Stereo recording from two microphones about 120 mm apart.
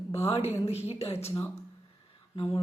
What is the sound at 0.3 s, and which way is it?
Speech, 55° left (ahead or behind).